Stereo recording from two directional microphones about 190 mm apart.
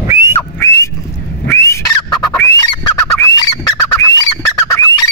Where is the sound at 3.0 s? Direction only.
20° left (ahead or behind).